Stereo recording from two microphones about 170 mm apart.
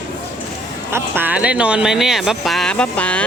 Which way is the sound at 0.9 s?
10° right (ahead or behind).